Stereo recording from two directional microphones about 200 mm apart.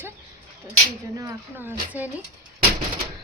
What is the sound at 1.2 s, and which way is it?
Speech, 15° right (ahead or behind).